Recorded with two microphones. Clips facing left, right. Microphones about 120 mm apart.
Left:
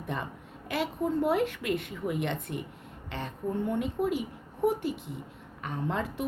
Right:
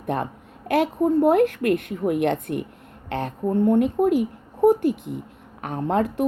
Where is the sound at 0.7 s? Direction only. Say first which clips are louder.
Right 10 dB; 45° right (ahead or behind).